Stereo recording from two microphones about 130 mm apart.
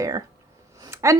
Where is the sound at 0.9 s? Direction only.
20° right (ahead or behind).